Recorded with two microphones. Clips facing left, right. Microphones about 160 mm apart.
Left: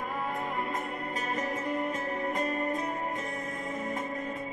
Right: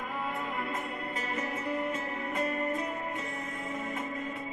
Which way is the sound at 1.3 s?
40° left (ahead or behind).